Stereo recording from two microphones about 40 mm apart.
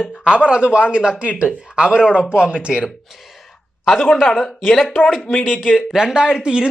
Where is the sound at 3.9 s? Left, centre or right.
Centre.